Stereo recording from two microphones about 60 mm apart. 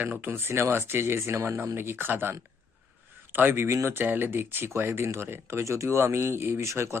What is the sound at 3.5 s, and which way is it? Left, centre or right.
Speech, right.